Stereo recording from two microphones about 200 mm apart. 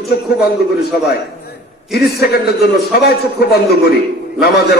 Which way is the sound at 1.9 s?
50° left (ahead or behind).